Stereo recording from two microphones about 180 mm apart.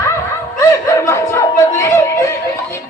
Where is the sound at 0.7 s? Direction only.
15° left (ahead or behind).